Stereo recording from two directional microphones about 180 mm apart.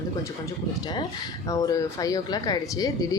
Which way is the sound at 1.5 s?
15° left (ahead or behind).